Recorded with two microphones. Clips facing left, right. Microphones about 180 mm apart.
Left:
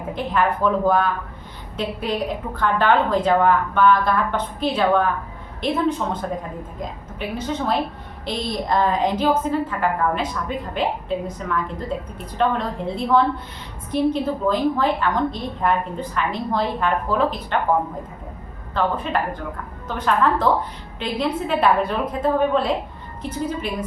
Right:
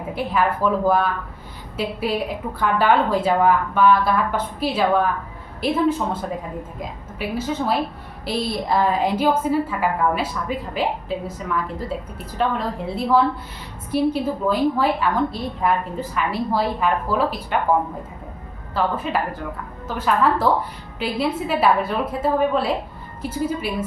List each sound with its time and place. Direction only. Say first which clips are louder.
0.1 s a woman's voice: even; 5° right (ahead or behind)
18.7 s a woman's voice: even; 5° right (ahead or behind)